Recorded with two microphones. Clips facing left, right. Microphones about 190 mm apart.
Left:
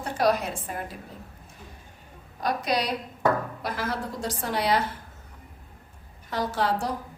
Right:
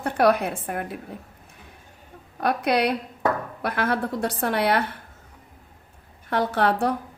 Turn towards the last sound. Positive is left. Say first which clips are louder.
# right 4 dB
turn(degrees=-60)  # may be behind; listen again after turning